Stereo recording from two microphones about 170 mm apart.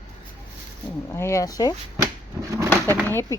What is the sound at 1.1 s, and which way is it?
Speech, 15° left (ahead or behind).